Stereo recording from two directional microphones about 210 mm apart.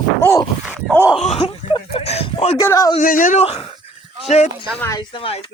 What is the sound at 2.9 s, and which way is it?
Speech, 40° left (ahead or behind).